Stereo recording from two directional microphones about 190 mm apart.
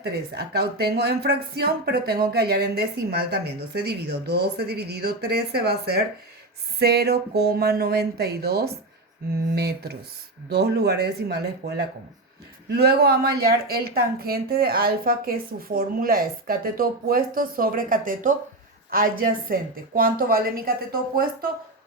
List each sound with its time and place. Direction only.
0.0 s speech: 55° right (ahead or behind)
12.7 s a woman's voice: 55° right (ahead or behind)